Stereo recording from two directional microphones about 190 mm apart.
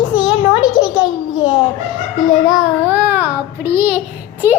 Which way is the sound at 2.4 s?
5° right (ahead or behind).